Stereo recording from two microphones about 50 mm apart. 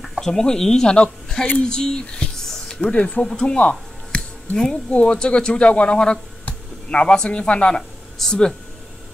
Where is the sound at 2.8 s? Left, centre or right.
Left.